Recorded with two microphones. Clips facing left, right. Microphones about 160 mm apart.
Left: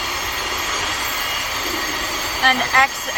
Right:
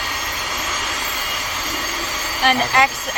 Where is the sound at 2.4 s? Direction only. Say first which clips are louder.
Right 2 dB; 5° right (ahead or behind).